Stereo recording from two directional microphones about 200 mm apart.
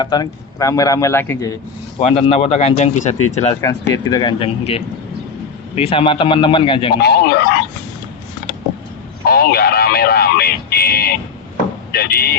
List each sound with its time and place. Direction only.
0.0 s a man's voice: 20° left (ahead or behind)
2.0 s speech: 30° left (ahead or behind)
3.9 s a man's voice: 20° left (ahead or behind)
6.9 s speech: 55° left (ahead or behind)
9.2 s a sound: 50° left (ahead or behind)
11.5 s chop: 50° left (ahead or behind)